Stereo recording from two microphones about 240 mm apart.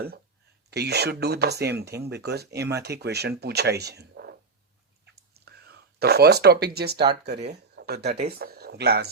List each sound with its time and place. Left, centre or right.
0.7 s speech: right
2.6 s speech: centre
2.8 s speech: right
5.3 s a sound: right
8.0 s speech: right
8.4 s speech: right